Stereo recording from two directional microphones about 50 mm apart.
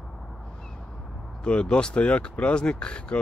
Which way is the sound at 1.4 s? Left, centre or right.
Centre.